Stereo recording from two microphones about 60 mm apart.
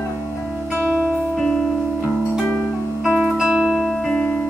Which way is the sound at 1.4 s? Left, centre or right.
Centre.